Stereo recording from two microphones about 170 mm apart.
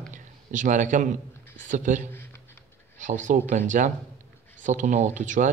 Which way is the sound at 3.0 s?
50° right (ahead or behind).